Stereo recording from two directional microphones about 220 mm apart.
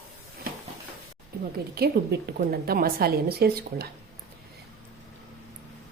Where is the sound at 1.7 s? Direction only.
45° right (ahead or behind).